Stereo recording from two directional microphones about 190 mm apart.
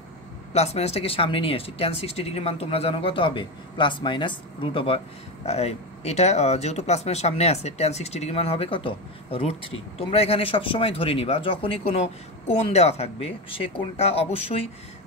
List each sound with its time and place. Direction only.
0.5 s speech: 35° left (ahead or behind)